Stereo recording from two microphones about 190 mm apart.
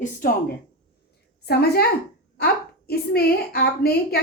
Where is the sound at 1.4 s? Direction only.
55° left (ahead or behind).